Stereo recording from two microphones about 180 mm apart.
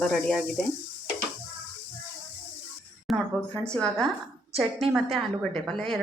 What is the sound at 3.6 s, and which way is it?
Speech, 5° left (ahead or behind).